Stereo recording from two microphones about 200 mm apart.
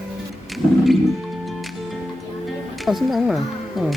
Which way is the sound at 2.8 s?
Centre (ahead or behind).